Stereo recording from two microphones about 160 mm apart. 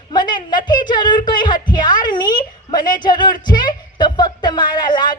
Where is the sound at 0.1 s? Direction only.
25° left (ahead or behind).